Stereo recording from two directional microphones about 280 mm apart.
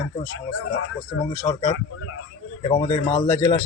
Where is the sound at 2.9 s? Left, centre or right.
Centre.